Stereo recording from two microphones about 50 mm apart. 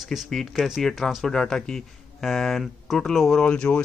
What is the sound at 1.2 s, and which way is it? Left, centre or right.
Speech, centre.